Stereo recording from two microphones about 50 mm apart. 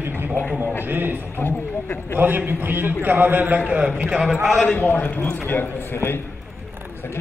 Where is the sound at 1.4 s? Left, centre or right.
Left.